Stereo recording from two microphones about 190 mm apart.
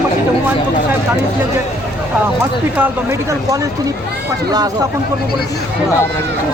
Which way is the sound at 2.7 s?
10° right (ahead or behind).